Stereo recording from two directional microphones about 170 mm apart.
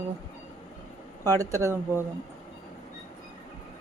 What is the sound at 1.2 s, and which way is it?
Speech, 20° right (ahead or behind).